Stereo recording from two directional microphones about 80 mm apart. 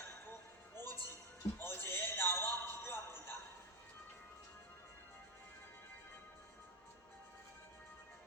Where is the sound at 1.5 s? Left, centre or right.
Left.